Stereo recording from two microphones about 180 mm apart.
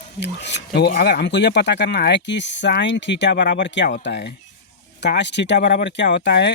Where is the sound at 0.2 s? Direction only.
75° left (ahead or behind).